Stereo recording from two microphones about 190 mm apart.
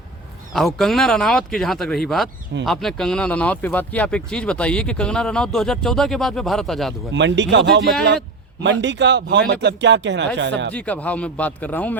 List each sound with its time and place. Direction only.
0.5 s speech: centre (ahead or behind)
7.1 s speech: 70° right (ahead or behind)
10.8 s a man's voice: 5° left (ahead or behind)